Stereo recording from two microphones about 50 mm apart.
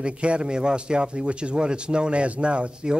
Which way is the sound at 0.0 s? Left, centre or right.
Right.